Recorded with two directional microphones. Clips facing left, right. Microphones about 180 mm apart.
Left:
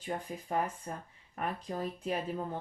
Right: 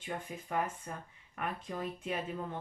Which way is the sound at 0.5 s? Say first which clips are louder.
Left 2 dB; 35° left (ahead or behind).